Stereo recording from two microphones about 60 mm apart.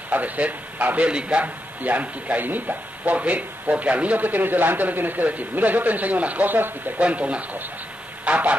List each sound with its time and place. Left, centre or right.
0.1 s a man's voice: right
7.0 s a man's voice: centre
8.3 s goose: right